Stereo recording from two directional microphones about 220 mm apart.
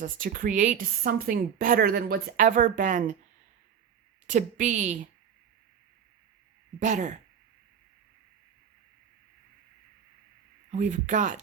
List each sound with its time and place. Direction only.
0.0 s a woman's voice: 40° right (ahead or behind)
4.3 s a woman's voice: 35° right (ahead or behind)
6.7 s a woman's voice: 35° right (ahead or behind)
10.7 s a woman's voice: 35° right (ahead or behind)